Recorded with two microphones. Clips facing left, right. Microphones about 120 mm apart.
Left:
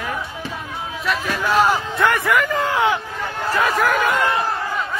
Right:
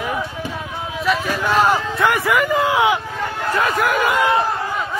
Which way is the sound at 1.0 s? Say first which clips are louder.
Right 2 dB; centre (ahead or behind).